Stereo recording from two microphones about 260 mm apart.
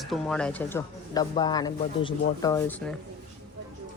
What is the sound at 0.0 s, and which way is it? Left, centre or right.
Speech, centre.